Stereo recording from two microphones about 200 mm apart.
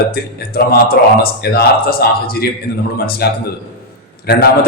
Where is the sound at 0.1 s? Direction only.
50° left (ahead or behind).